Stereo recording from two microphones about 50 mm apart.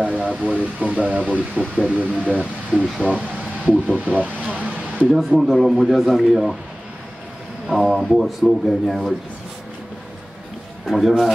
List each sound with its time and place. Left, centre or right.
0.0 s speech: right
5.1 s speech: centre
7.7 s speech: centre
10.9 s speech: centre